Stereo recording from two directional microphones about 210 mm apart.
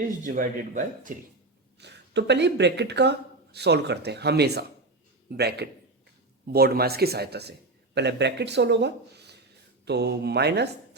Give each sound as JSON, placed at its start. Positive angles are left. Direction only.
{"t": 0.2, "sound": "speech", "side_deg": -40}
{"t": 1.8, "sound": "speech", "side_deg": -55}